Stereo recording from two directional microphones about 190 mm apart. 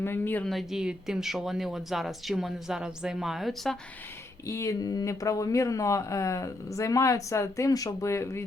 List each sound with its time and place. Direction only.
0.0 s speech: 10° left (ahead or behind)
4.4 s speech: 15° left (ahead or behind)